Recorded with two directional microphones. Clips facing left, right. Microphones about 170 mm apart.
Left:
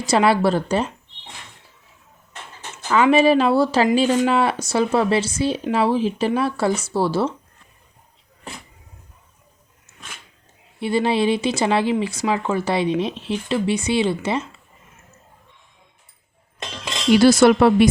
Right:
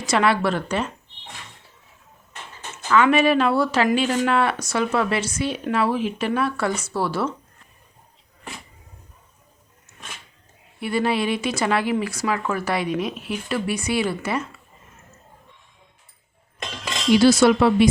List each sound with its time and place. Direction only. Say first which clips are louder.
0.0 s speech: left 3 dB; 30° left (ahead or behind)
2.9 s speech: left 2 dB; 30° left (ahead or behind)
10.8 s speech: left 3 dB; 25° left (ahead or behind)
17.1 s speech: left 2 dB; 50° left (ahead or behind)